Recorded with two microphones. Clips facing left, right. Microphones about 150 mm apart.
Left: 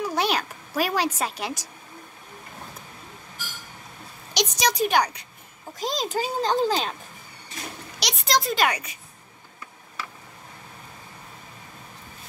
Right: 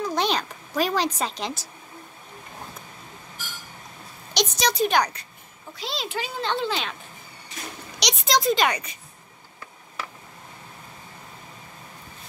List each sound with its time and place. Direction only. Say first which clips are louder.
0.0 s cat: even; 10° left (ahead or behind)
4.3 s speech: even; 10° left (ahead or behind)
5.8 s a child's voice: left 4 dB; 45° left (ahead or behind)
8.0 s speech: right 2 dB; centre (ahead or behind)